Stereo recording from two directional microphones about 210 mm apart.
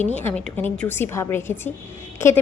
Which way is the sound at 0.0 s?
10° left (ahead or behind).